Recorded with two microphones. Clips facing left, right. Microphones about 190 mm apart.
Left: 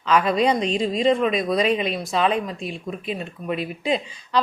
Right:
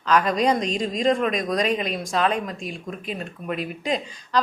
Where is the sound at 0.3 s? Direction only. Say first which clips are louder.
Left 1 dB; 40° right (ahead or behind).